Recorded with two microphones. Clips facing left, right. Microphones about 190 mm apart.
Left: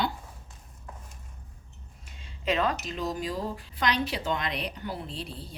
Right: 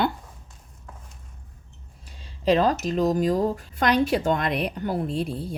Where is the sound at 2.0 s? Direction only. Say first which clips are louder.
Right 8 dB; 35° right (ahead or behind).